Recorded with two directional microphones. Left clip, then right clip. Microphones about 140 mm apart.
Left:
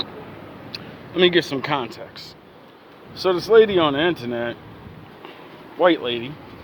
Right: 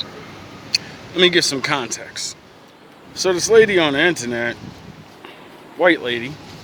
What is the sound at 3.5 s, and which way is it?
Speech, 20° right (ahead or behind).